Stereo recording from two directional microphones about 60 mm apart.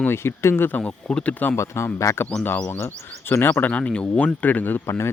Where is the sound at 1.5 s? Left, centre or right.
Left.